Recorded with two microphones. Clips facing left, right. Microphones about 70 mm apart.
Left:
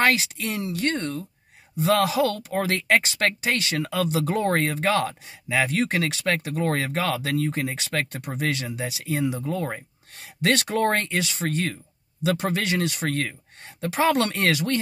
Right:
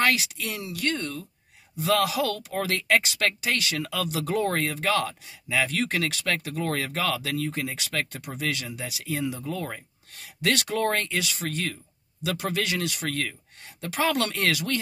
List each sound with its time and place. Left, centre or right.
0.0 s speech: left